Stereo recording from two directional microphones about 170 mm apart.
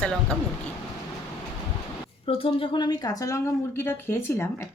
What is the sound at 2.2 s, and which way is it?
A woman's voice, 35° left (ahead or behind).